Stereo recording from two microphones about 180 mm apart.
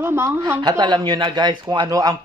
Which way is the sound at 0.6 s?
25° right (ahead or behind).